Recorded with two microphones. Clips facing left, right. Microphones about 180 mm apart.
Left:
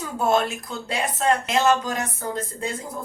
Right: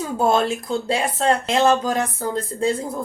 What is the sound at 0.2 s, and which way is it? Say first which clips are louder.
A woman's voice: right 2 dB; 30° right (ahead or behind).